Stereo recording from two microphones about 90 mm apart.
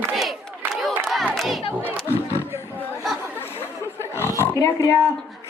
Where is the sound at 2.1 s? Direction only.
25° left (ahead or behind).